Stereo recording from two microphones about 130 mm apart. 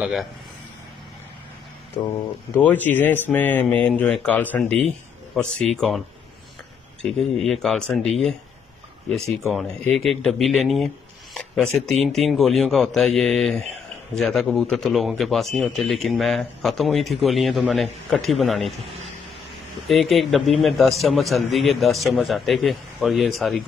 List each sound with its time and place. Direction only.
0.0 s a man's voice: centre (ahead or behind)
2.0 s speech: 30° left (ahead or behind)
2.5 s speech: 15° left (ahead or behind)
5.4 s a man's voice: centre (ahead or behind)
9.9 s a man's voice: centre (ahead or behind)
11.3 s a sound: 5° left (ahead or behind)
11.8 s a man's voice: centre (ahead or behind)
19.9 s a man's voice: centre (ahead or behind)